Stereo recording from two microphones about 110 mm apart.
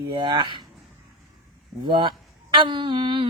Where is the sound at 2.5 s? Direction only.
45° right (ahead or behind).